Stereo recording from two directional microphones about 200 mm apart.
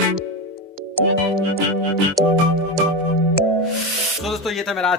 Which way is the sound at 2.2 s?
Centre (ahead or behind).